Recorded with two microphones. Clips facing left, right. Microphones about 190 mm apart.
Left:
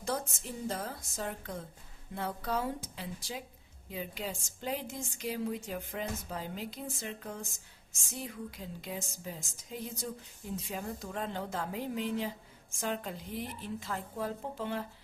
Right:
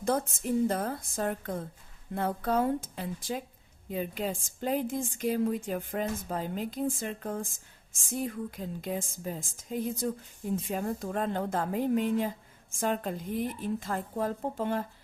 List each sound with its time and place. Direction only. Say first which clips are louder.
0.0 s a woman's voice: right 7 dB; 55° right (ahead or behind)